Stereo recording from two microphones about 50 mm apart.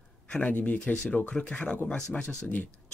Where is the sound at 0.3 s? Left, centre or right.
Left.